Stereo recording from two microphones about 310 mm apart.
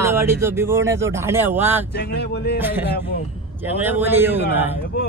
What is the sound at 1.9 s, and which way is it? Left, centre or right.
Speech, left.